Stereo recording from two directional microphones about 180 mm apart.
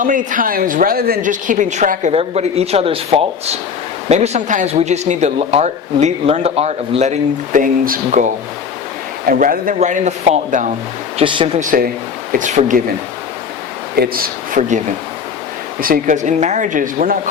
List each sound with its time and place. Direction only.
0.0 s a woman's voice: 45° right (ahead or behind)
11.2 s speech: 30° right (ahead or behind)
11.6 s a woman's voice: 50° right (ahead or behind)
13.9 s speech: 55° right (ahead or behind)
15.8 s a woman's voice: 50° right (ahead or behind)